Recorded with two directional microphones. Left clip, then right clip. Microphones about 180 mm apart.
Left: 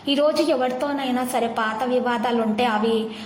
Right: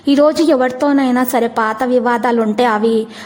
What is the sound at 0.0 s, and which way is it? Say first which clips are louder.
A woman's voice: right 8 dB; 45° right (ahead or behind).